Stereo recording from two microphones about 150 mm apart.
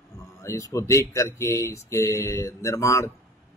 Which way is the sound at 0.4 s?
20° left (ahead or behind).